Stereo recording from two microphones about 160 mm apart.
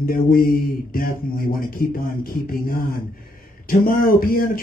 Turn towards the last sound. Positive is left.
turn(degrees=65)  # may be behind; listen again after turning